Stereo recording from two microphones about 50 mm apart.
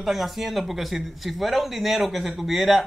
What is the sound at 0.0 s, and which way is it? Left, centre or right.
Speech, centre.